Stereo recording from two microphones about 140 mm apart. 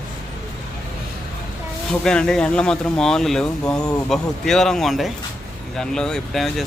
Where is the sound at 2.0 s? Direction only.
5° left (ahead or behind).